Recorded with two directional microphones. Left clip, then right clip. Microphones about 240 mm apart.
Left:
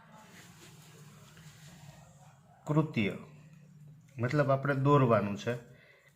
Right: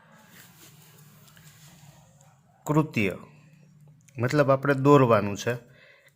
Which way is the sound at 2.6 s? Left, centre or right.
Right.